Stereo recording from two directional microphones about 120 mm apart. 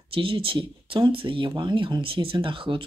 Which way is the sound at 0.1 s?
50° right (ahead or behind).